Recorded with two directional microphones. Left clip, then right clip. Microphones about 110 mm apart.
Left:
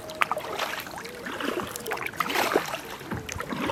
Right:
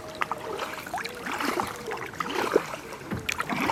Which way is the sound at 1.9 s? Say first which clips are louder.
Left 3 dB; 50° left (ahead or behind).